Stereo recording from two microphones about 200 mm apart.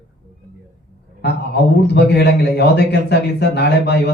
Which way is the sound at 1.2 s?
55° left (ahead or behind).